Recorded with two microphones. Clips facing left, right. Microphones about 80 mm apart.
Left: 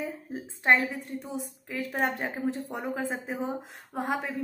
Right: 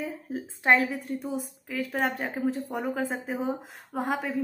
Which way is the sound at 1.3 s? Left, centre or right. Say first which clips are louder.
Right 2 dB; centre.